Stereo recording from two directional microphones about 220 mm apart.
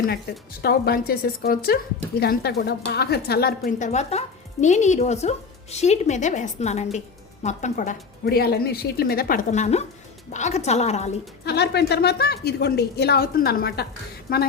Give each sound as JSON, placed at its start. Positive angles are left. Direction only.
{"t": 0.6, "sound": "a woman's voice", "side_deg": 45}
{"t": 3.7, "sound": "a woman's voice", "side_deg": 35}
{"t": 11.4, "sound": "a woman's voice", "side_deg": 50}